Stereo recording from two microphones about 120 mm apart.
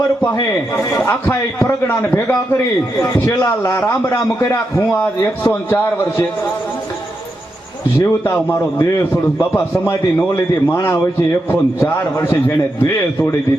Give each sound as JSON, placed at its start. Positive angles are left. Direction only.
{"t": 1.0, "sound": "a man's voice", "side_deg": 15}
{"t": 8.0, "sound": "a man's voice", "side_deg": 20}